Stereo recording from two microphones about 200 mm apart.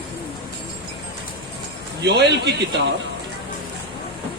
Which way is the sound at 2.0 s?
55° right (ahead or behind).